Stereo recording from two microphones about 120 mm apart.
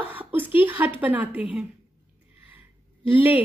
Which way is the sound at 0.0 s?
15° right (ahead or behind).